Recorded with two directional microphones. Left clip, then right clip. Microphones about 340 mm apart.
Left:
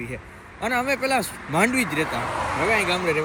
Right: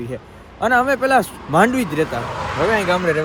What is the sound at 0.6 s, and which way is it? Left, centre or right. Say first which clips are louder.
Speech: right 7 dB; right.